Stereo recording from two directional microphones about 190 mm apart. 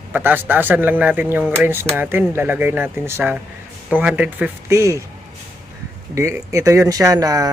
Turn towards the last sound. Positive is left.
turn(degrees=-20)  # may be behind; listen again after turning